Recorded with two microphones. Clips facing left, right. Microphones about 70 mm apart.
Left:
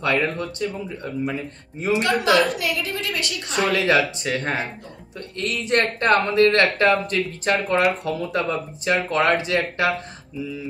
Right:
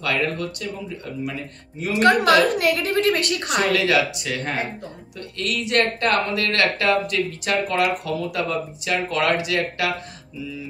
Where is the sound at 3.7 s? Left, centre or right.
Left.